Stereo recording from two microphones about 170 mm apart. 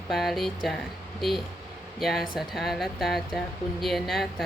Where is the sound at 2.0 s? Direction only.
Centre (ahead or behind).